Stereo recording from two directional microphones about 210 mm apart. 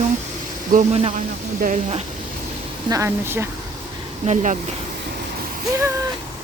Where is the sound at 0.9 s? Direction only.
30° right (ahead or behind).